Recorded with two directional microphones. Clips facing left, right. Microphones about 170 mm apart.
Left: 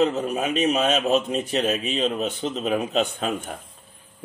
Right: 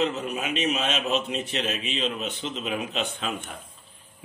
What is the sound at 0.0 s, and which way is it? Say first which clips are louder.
A man's voice: left 5 dB; 40° left (ahead or behind).